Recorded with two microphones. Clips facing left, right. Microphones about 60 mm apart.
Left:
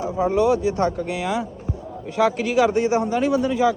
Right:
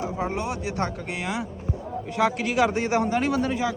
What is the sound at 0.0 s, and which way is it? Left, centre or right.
A woman's voice, right.